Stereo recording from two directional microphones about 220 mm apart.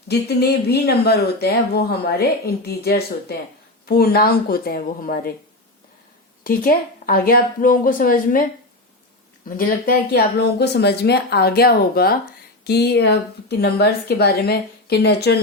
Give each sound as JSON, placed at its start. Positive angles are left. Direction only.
{"t": 0.1, "sound": "a woman's voice", "side_deg": 50}
{"t": 6.4, "sound": "speech", "side_deg": 40}
{"t": 9.6, "sound": "a woman's voice", "side_deg": 40}